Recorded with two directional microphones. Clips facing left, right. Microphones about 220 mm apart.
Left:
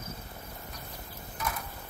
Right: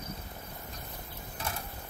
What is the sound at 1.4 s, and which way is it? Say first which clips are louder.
Mechanisms: left 3 dB; 30° right (ahead or behind).